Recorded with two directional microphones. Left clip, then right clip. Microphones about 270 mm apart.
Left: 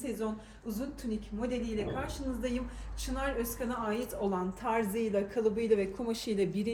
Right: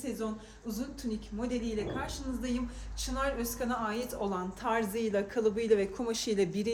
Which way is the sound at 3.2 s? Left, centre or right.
Centre.